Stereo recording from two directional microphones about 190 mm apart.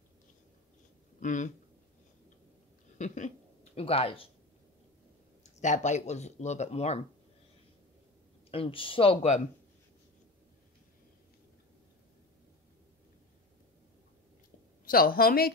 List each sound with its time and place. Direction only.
1.2 s speech: 40° left (ahead or behind)
3.0 s speech: 40° left (ahead or behind)
5.4 s speech: 40° left (ahead or behind)
8.5 s speech: 30° left (ahead or behind)
14.9 s a woman's voice: 50° left (ahead or behind)